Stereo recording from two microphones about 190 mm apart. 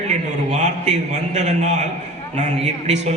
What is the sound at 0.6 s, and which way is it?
A man's voice, 40° right (ahead or behind).